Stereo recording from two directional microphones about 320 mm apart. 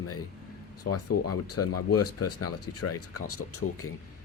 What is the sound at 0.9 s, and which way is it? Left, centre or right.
Speech, left.